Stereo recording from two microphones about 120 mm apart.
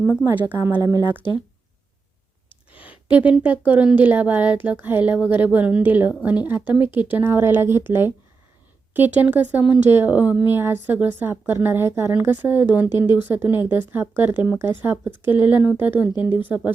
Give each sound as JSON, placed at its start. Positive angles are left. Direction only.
{"t": 0.0, "sound": "speech", "side_deg": -10}
{"t": 2.7, "sound": "speech", "side_deg": -10}